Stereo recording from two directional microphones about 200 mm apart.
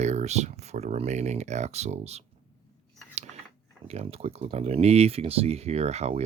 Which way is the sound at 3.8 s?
30° right (ahead or behind).